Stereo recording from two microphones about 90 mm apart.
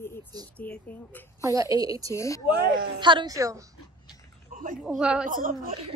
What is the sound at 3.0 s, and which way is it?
Speech, 60° right (ahead or behind).